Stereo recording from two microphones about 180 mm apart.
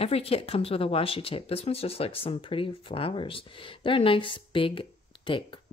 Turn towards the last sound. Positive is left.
turn(degrees=30)  # may be behind; listen again after turning